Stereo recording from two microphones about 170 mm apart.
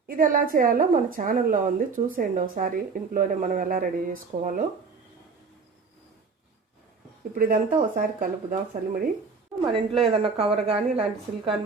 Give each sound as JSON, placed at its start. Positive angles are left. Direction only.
{"t": 0.1, "sound": "a woman's voice", "side_deg": -55}
{"t": 7.3, "sound": "a woman's voice", "side_deg": -55}
{"t": 9.7, "sound": "speech", "side_deg": -35}